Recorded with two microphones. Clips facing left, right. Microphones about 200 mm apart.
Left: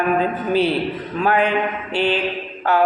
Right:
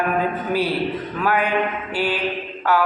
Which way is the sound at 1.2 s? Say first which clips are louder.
Left 3 dB; 25° left (ahead or behind).